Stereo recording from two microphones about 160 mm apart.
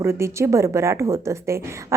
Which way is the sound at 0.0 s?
15° right (ahead or behind).